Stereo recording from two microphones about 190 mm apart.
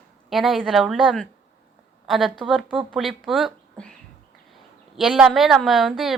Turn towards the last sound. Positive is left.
turn(degrees=0)  # may be behind; listen again after turning